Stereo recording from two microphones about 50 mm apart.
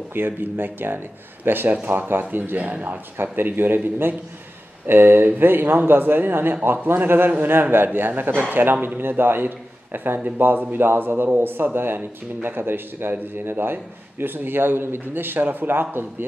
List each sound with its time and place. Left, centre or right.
0.1 s speech: right